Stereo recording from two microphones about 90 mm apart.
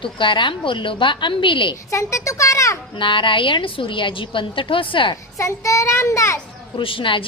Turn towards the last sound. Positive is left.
turn(degrees=70)  # may be behind; listen again after turning